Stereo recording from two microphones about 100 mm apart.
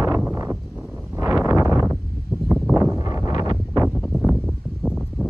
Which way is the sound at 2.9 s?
35° right (ahead or behind).